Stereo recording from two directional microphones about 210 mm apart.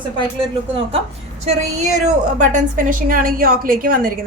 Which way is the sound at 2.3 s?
35° right (ahead or behind).